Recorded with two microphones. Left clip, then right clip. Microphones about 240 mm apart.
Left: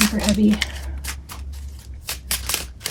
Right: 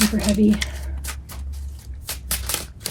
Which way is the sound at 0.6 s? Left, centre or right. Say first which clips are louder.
Left 1 dB; centre.